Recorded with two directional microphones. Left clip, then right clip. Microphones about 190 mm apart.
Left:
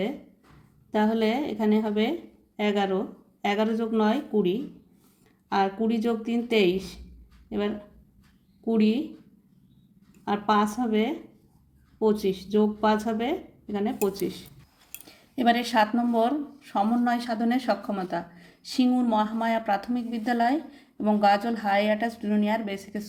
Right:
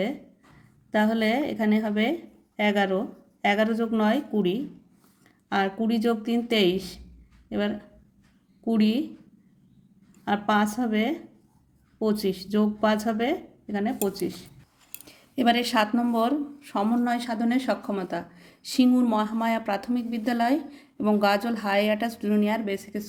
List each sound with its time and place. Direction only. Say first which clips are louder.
0.9 s speech: right 1 dB; 20° right (ahead or behind)
8.6 s speech: even; 20° right (ahead or behind)
10.2 s speech: even; 20° right (ahead or behind)